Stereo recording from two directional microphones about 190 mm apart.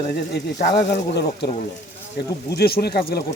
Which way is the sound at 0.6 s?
60° left (ahead or behind).